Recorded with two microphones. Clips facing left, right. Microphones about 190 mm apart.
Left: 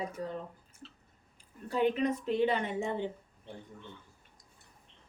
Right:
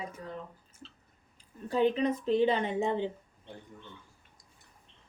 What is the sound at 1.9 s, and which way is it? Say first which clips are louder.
Speech: right 3 dB; 25° right (ahead or behind).